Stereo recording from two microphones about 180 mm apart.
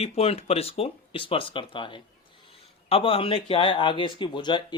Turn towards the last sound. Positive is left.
turn(degrees=25)  # may be behind; listen again after turning